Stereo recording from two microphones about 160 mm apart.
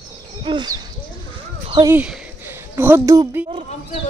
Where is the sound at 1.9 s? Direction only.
5° right (ahead or behind).